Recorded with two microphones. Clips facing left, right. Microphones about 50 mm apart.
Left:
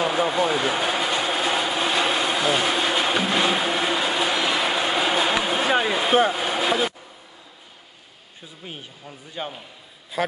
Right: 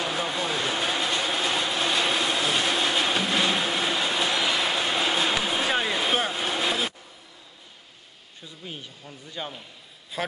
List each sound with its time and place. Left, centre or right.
0.0 s vehicle: centre
8.6 s speech: centre
10.2 s a man's voice: centre